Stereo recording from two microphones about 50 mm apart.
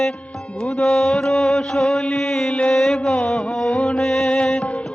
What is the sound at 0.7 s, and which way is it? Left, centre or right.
Mantra, centre.